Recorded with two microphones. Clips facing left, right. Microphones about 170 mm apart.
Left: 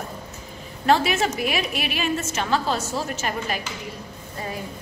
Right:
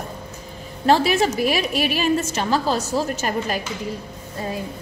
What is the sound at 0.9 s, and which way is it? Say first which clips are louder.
A woman's voice: right 3 dB; 35° right (ahead or behind).